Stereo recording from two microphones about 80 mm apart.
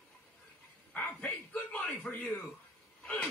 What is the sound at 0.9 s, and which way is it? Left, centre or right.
Bow-wow, centre.